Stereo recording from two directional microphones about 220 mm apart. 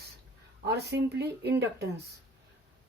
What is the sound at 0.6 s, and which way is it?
Speech, 45° right (ahead or behind).